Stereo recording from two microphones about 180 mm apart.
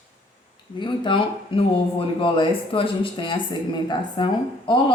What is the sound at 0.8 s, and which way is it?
Speech, 25° left (ahead or behind).